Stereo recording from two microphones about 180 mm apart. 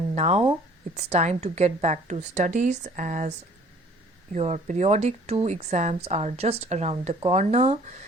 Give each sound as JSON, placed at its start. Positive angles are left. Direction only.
{"t": 0.1, "sound": "a woman's voice", "side_deg": -40}
{"t": 4.3, "sound": "a woman's voice", "side_deg": -35}